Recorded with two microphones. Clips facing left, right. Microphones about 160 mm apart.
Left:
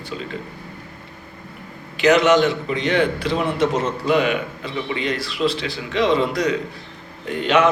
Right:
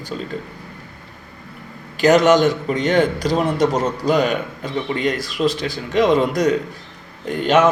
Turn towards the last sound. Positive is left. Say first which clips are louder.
# right 2 dB
turn(degrees=-45)  # may be behind; listen again after turning